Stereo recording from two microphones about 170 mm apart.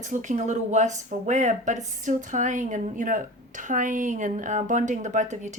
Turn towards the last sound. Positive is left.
turn(degrees=-45)  # may be behind; listen again after turning